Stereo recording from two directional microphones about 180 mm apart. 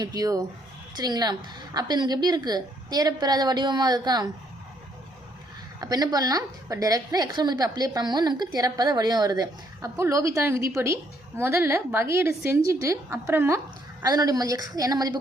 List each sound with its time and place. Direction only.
0.0 s a woman's voice: 20° right (ahead or behind)
5.8 s a woman's voice: 20° right (ahead or behind)